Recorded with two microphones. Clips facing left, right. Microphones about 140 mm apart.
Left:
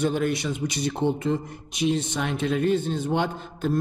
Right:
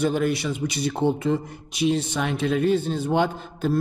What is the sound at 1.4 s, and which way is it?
Speech, 10° right (ahead or behind).